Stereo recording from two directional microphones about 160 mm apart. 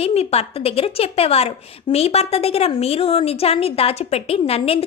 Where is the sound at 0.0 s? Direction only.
40° left (ahead or behind).